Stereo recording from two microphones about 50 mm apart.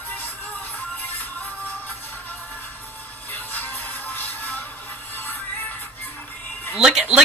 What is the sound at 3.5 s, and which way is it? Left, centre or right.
Music, left.